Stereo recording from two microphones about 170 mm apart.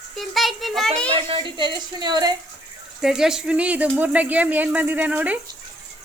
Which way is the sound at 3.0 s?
5° right (ahead or behind).